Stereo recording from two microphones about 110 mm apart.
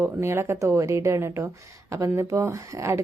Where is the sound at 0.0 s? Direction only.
25° right (ahead or behind).